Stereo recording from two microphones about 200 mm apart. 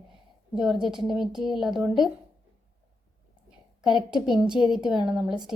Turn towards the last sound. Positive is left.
turn(degrees=0)  # may be behind; listen again after turning